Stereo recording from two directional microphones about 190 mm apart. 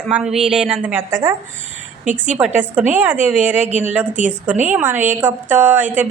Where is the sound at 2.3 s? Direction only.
10° right (ahead or behind).